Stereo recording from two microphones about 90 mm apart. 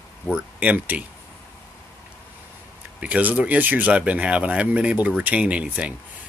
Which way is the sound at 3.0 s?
15° right (ahead or behind).